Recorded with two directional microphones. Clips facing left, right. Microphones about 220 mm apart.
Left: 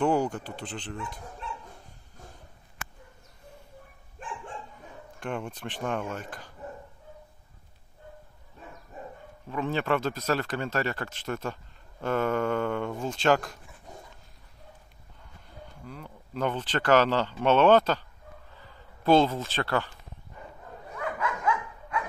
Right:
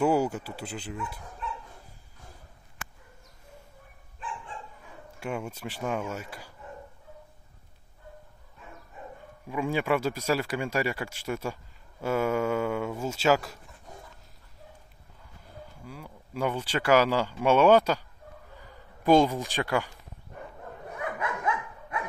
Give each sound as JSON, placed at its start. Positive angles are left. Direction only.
{"t": 0.0, "sound": "speech", "side_deg": -10}
{"t": 4.2, "sound": "dog", "side_deg": 45}
{"t": 5.2, "sound": "speech", "side_deg": -10}
{"t": 9.5, "sound": "speech", "side_deg": -10}
{"t": 15.4, "sound": "speech", "side_deg": -5}
{"t": 19.0, "sound": "speech", "side_deg": -15}
{"t": 21.0, "sound": "dog", "side_deg": -20}